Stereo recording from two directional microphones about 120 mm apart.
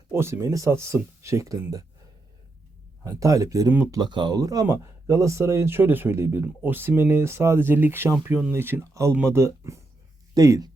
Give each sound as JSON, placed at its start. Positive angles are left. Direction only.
{"t": 0.1, "sound": "speech", "side_deg": -20}
{"t": 3.0, "sound": "speech", "side_deg": -25}